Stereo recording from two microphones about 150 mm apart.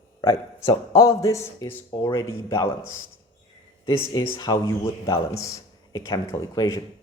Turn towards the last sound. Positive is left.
turn(degrees=20)  # may be behind; listen again after turning